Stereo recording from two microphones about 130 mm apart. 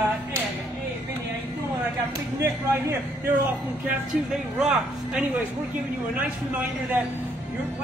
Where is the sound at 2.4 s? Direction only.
20° right (ahead or behind).